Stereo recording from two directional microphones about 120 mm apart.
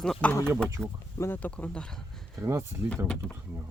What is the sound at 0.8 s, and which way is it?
Speech, 20° right (ahead or behind).